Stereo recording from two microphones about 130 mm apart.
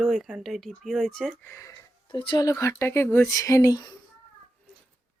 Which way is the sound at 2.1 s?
40° left (ahead or behind).